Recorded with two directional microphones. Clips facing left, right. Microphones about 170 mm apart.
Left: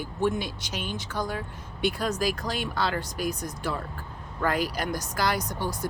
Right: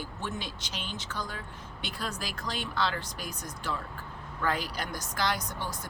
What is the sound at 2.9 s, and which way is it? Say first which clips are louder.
Speech: left 9 dB; 10° left (ahead or behind).